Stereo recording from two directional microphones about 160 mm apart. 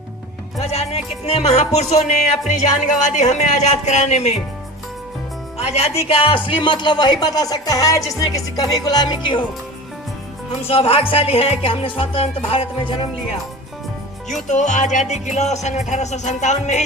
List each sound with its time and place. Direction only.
0.6 s music: 40° left (ahead or behind)
2.5 s speech: 50° left (ahead or behind)
5.5 s speech: 40° left (ahead or behind)
10.7 s music: 35° left (ahead or behind)
14.4 s speech: 50° left (ahead or behind)